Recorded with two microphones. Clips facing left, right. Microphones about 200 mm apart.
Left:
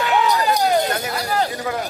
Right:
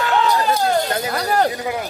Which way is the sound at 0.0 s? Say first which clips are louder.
Even; 15° left (ahead or behind).